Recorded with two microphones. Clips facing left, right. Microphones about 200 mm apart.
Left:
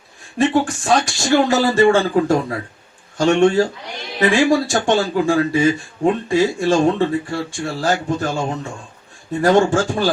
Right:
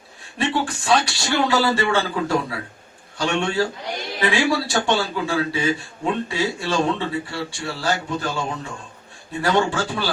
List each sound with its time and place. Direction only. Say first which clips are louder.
0.3 s speech: left 7 dB; 45° left (ahead or behind)